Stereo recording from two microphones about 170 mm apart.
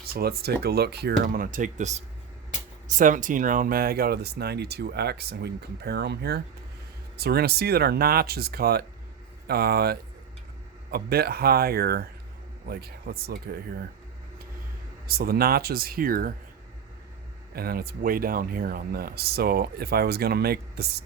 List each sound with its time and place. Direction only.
0.0 s speech: 65° right (ahead or behind)
1.2 s speech: 50° right (ahead or behind)
15.0 s speech: 65° right (ahead or behind)
17.5 s speech: 65° right (ahead or behind)